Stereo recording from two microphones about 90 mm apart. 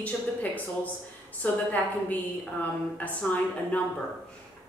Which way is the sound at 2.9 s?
15° left (ahead or behind).